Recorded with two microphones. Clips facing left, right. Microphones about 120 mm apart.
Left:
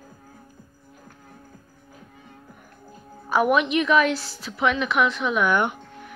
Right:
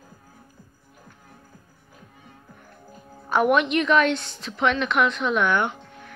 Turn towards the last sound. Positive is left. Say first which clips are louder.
# left 1 dB
turn(degrees=15)  # may be behind; listen again after turning